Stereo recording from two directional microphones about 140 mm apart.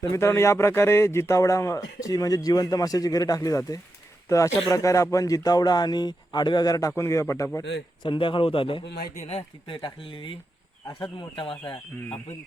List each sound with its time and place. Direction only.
0.0 s a man's voice: 20° left (ahead or behind)
8.0 s speech: 35° left (ahead or behind)
9.0 s speech: 90° left
9.2 s speech: 40° left (ahead or behind)